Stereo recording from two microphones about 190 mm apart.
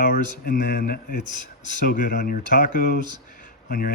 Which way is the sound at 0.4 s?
50° left (ahead or behind).